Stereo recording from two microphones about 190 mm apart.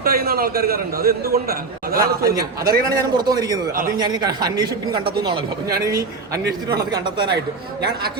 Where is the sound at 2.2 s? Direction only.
15° right (ahead or behind).